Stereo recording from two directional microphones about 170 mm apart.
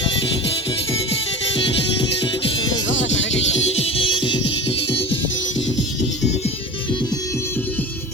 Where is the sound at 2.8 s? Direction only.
90° left.